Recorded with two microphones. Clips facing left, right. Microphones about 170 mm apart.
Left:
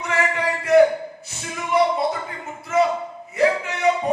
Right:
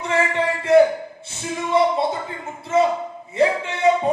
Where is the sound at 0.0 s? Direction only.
25° right (ahead or behind).